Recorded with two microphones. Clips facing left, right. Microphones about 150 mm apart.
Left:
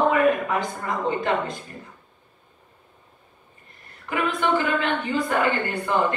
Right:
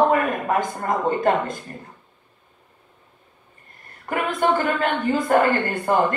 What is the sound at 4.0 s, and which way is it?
A man's voice, 45° right (ahead or behind).